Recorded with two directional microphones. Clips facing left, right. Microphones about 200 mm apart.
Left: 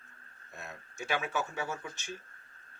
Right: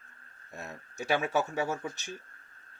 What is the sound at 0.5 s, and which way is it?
Speech, 40° right (ahead or behind).